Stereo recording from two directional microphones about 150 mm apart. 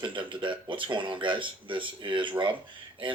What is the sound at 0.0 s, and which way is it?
Speech, 35° right (ahead or behind).